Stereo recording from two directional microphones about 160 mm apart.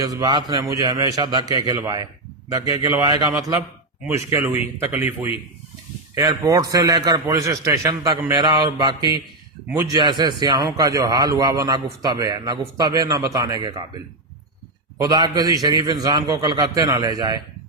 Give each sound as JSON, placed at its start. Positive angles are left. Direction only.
{"t": 0.0, "sound": "speech", "side_deg": -20}
{"t": 15.0, "sound": "speech", "side_deg": -25}